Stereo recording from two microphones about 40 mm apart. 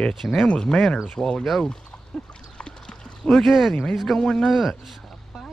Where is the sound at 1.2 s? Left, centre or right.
Centre.